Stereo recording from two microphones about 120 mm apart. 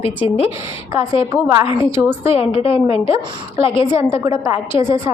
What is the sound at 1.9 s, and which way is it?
Speech, 20° right (ahead or behind).